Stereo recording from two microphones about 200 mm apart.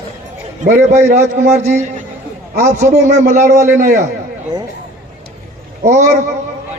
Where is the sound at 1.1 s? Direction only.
35° right (ahead or behind).